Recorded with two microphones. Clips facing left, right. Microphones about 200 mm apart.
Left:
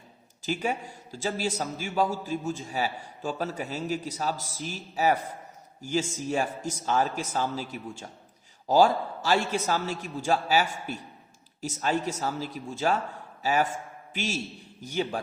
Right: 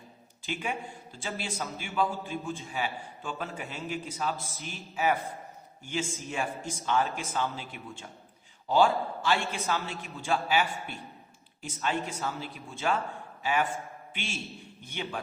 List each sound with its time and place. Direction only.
0.4 s a man's voice: 40° left (ahead or behind)